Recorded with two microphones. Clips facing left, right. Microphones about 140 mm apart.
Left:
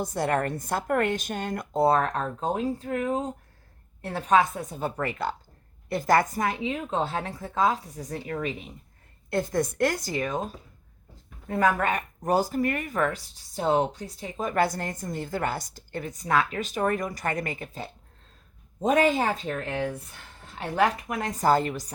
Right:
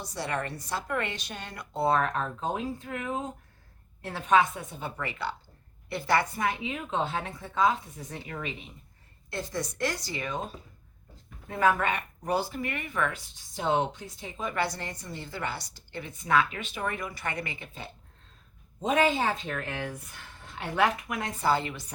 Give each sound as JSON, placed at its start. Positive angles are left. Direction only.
{"t": 0.0, "sound": "a woman's voice", "side_deg": 50}
{"t": 9.3, "sound": "a woman's voice", "side_deg": 50}